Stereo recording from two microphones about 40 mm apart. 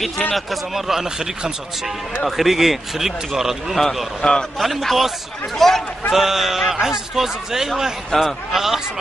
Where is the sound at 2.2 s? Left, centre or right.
Centre.